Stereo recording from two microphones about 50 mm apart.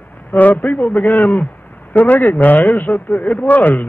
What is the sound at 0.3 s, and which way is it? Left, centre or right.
A man's voice, left.